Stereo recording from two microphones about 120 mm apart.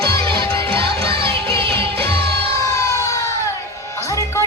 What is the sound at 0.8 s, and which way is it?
Music, 50° right (ahead or behind).